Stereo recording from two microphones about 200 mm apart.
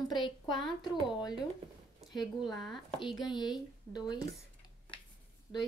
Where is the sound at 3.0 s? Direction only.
25° left (ahead or behind).